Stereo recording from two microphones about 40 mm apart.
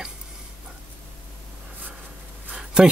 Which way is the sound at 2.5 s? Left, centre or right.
Right.